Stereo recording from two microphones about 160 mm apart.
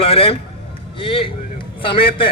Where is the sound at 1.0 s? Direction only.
35° left (ahead or behind).